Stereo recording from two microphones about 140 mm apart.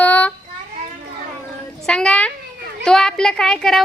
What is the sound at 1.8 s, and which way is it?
Speech, 5° left (ahead or behind).